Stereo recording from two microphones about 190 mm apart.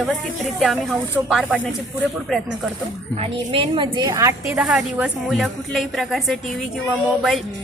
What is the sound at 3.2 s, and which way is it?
A woman's voice, 30° right (ahead or behind).